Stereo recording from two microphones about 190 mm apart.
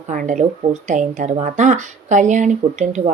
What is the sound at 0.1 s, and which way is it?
Speech, 40° right (ahead or behind).